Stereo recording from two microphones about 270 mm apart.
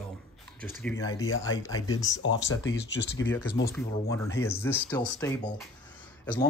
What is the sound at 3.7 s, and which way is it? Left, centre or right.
Speech, centre.